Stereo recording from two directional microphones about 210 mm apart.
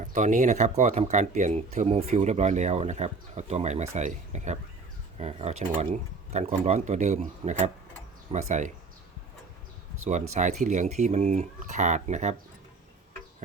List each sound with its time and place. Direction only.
0.0 s speech: 35° right (ahead or behind)
10.3 s speech: 35° right (ahead or behind)